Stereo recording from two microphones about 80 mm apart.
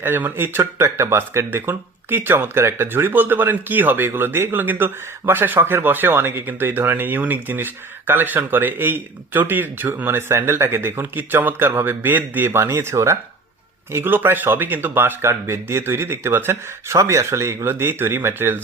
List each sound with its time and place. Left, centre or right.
0.0 s speech: right